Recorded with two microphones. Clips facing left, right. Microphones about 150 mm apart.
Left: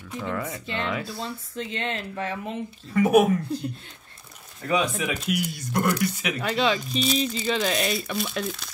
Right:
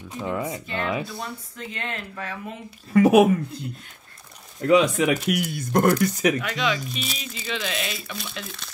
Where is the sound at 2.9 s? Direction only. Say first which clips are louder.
Right 3 dB; 90° right.